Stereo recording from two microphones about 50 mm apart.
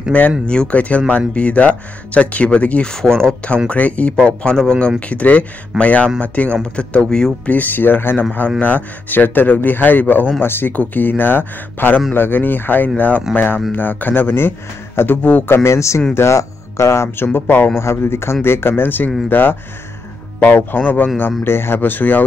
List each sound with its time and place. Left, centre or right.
0.1 s speech: left
2.9 s speech: centre
3.6 s speech: left
4.2 s speech: centre
7.4 s speech: left
14.2 s a man's voice: left
17.2 s speech: left
17.7 s speech: left
21.5 s speech: left